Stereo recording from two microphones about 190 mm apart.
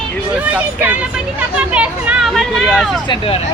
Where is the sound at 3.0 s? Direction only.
30° left (ahead or behind).